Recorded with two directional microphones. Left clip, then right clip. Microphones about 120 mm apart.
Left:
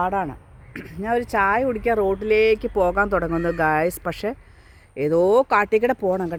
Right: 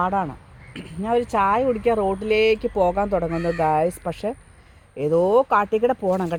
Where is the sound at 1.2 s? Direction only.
45° left (ahead or behind); by 4.4 s 65° left (ahead or behind).